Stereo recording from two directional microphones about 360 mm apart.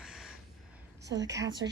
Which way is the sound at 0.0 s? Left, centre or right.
Centre.